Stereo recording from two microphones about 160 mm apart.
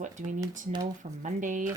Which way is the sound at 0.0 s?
50° right (ahead or behind).